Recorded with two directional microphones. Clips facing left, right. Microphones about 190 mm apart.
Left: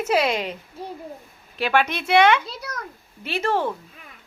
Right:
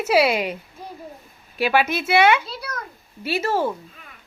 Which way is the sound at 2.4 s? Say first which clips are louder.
Right 1 dB; 20° left (ahead or behind).